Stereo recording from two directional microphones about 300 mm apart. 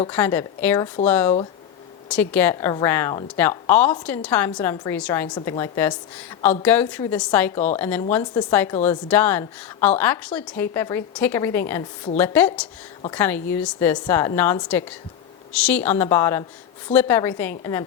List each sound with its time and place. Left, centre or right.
0.1 s speech: centre
7.5 s a woman's voice: left
7.8 s speech: centre